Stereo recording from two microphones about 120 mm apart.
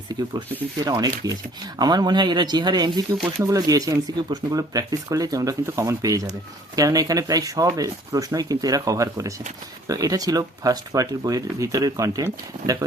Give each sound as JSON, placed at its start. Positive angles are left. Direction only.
{"t": 0.9, "sound": "speech", "side_deg": -35}